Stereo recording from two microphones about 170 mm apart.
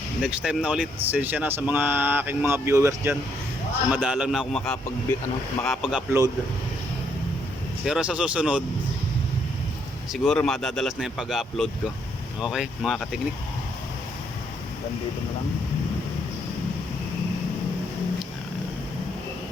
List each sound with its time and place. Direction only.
0.2 s speech: 5° right (ahead or behind)
3.9 s speech: 5° right (ahead or behind)
6.1 s speech: 15° right (ahead or behind)
7.9 s speech: 5° right (ahead or behind)
10.1 s speech: centre (ahead or behind)